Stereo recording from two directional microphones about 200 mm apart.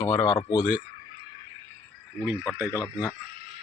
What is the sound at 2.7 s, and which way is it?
Speech, 15° left (ahead or behind).